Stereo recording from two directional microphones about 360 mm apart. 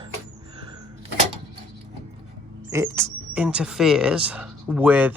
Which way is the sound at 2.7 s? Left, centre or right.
Centre.